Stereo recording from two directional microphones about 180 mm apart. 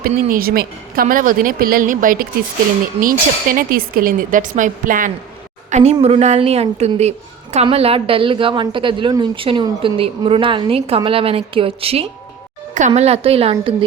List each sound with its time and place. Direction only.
0.1 s a woman's voice: 50° right (ahead or behind); by 13.7 s 35° right (ahead or behind)